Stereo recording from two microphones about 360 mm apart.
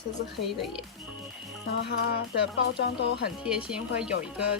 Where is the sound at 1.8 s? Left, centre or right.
Left.